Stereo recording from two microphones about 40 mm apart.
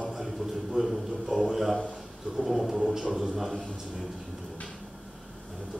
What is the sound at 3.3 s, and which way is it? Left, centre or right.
Speech, centre.